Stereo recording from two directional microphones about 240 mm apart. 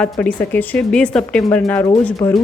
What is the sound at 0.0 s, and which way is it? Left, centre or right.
Speech, centre.